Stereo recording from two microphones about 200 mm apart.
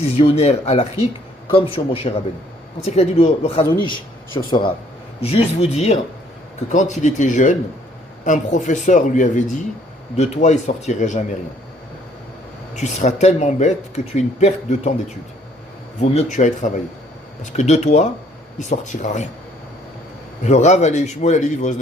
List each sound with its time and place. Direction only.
0.2 s a man's voice: 30° left (ahead or behind)
12.8 s speech: 35° left (ahead or behind)
16.0 s speech: 35° left (ahead or behind)
20.4 s speech: 35° left (ahead or behind)